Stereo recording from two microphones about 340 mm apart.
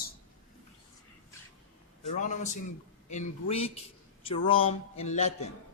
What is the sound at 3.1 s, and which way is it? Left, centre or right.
Speech, centre.